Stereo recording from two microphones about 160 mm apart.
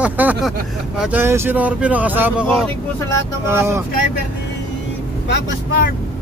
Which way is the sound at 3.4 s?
15° right (ahead or behind).